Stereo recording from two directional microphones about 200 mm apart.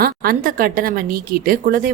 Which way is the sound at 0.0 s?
45° right (ahead or behind).